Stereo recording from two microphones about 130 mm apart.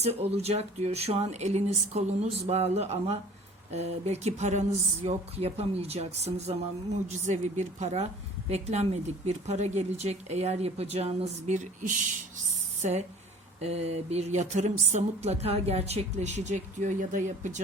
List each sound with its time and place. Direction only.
0.0 s speech: 55° right (ahead or behind)
5.0 s speech: 50° right (ahead or behind); by 11.9 s 70° right (ahead or behind)
12.8 s speech: 60° right (ahead or behind)